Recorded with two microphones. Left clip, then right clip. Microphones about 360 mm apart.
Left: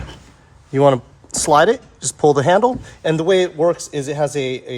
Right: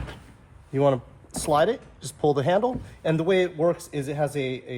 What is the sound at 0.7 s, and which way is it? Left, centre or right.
Speech, left.